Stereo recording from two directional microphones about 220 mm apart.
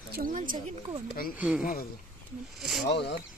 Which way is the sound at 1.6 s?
40° left (ahead or behind).